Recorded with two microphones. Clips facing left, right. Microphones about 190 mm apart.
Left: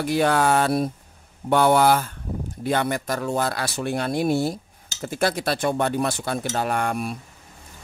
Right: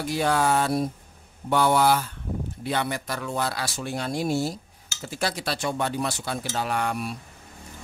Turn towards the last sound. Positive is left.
turn(degrees=50)  # may be behind; listen again after turning